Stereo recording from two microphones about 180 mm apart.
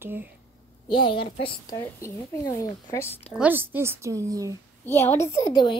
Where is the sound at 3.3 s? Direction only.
10° right (ahead or behind).